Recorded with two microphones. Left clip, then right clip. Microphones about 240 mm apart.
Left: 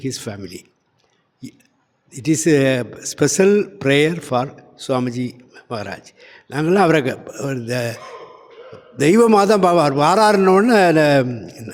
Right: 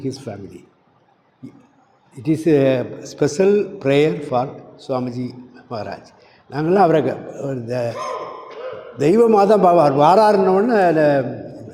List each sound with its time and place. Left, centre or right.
0.0 s a man's voice: left
2.1 s a man's voice: left
9.0 s a man's voice: left